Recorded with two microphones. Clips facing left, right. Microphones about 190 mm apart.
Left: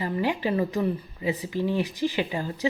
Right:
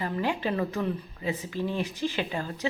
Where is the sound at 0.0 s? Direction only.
15° left (ahead or behind).